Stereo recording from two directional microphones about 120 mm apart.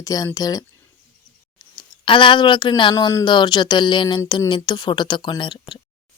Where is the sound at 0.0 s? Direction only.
30° left (ahead or behind).